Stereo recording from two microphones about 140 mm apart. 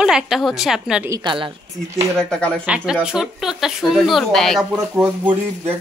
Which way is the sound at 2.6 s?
5° right (ahead or behind).